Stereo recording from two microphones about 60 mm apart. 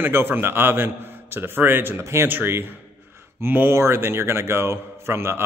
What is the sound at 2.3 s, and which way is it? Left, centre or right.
A man's voice, right.